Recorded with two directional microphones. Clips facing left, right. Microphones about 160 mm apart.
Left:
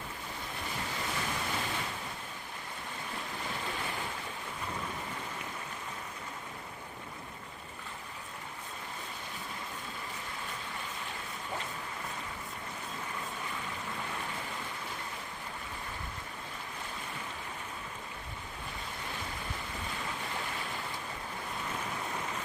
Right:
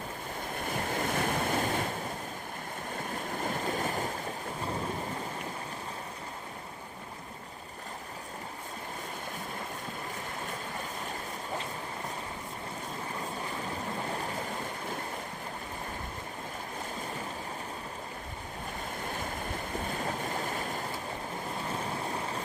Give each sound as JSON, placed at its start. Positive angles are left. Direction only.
{"t": 0.5, "sound": "waves", "side_deg": -50}
{"t": 3.2, "sound": "boat", "side_deg": -45}
{"t": 19.9, "sound": "boat", "side_deg": -45}
{"t": 21.7, "sound": "waves", "side_deg": -35}